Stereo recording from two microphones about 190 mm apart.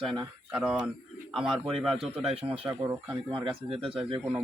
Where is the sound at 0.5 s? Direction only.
5° right (ahead or behind).